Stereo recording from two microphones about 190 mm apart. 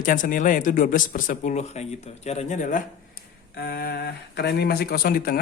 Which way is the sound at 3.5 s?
55° left (ahead or behind).